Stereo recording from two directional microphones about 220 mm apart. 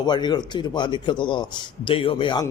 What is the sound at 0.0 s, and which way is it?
A man's voice, 20° left (ahead or behind).